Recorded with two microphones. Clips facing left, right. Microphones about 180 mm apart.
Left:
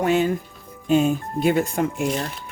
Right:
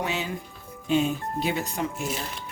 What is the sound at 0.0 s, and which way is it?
Speech, 50° left (ahead or behind).